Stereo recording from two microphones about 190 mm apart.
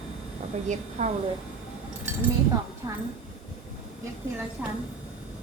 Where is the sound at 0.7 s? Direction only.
40° right (ahead or behind).